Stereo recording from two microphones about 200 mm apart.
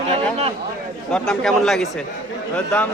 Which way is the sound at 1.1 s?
5° left (ahead or behind).